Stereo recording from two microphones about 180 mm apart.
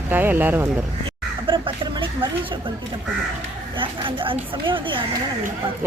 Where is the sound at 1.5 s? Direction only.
30° right (ahead or behind).